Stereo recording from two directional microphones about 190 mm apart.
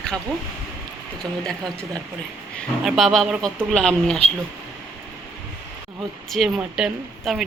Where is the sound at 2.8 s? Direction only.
Centre (ahead or behind).